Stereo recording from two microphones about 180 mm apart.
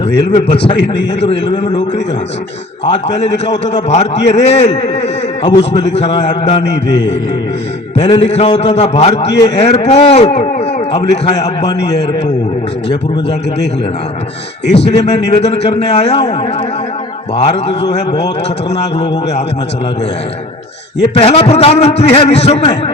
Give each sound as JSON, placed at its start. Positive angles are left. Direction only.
{"t": 0.3, "sound": "a man's voice", "side_deg": 35}
{"t": 0.8, "sound": "a man's voice", "side_deg": 75}
{"t": 1.3, "sound": "a man's voice", "side_deg": 30}
{"t": 2.8, "sound": "a man's voice", "side_deg": 35}
{"t": 3.3, "sound": "a man's voice", "side_deg": 80}
{"t": 3.7, "sound": "a man's voice", "side_deg": 40}
{"t": 7.9, "sound": "a man's voice", "side_deg": 35}
{"t": 14.9, "sound": "a man's voice", "side_deg": 35}
{"t": 18.7, "sound": "a man's voice", "side_deg": 35}
{"t": 21.1, "sound": "a man's voice", "side_deg": 35}